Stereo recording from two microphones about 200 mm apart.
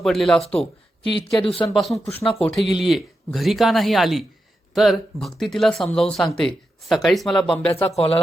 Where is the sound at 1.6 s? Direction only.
Centre (ahead or behind).